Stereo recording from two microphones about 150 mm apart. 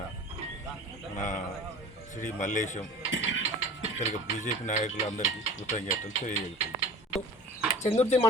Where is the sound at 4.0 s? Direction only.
55° left (ahead or behind).